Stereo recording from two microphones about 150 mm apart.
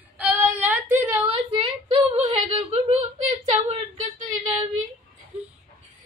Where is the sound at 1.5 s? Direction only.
40° right (ahead or behind).